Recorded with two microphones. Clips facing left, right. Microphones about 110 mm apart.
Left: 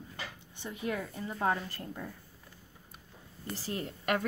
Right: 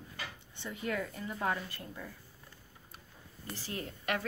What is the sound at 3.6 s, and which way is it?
Speech, 35° left (ahead or behind).